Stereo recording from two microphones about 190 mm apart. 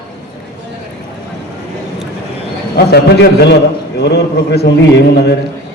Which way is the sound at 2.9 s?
60° left (ahead or behind).